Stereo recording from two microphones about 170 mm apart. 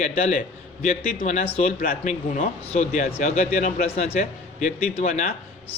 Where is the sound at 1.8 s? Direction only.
55° left (ahead or behind).